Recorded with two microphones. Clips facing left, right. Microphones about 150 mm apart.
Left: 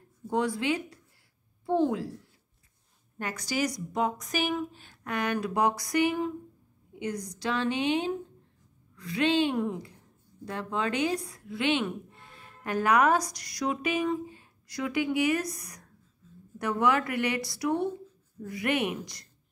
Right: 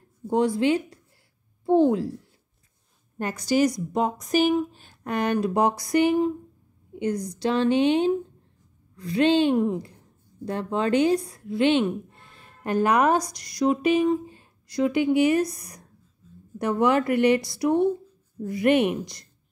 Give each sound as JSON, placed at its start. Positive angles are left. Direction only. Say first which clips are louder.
{"t": 0.3, "sound": "a woman's voice", "louder": "right 7 dB", "side_deg": -30}
{"t": 3.2, "sound": "a woman's voice", "louder": "right 8 dB", "side_deg": -30}